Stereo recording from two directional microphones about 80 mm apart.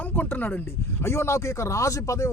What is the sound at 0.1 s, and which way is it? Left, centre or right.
Speech, left.